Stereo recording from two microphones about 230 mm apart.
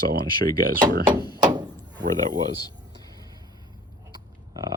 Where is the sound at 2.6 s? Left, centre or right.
Centre.